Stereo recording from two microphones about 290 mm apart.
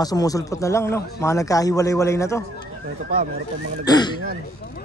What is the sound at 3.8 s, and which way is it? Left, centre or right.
Speech, centre.